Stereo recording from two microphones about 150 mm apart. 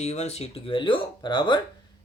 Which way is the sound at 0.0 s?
45° left (ahead or behind).